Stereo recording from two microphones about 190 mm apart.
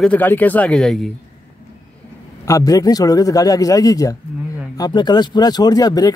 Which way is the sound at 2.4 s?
15° left (ahead or behind).